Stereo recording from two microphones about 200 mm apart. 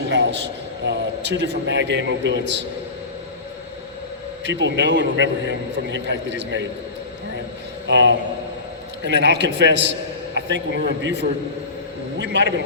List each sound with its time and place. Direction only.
0.1 s a man's voice: 60° right (ahead or behind)
4.4 s a man's voice: 65° right (ahead or behind)
7.9 s a man's voice: 60° right (ahead or behind)